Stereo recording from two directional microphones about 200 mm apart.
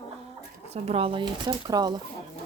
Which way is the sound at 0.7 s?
30° right (ahead or behind).